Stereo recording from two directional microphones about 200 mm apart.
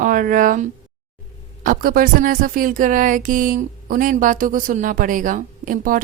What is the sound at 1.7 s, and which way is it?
Speech, 45° right (ahead or behind).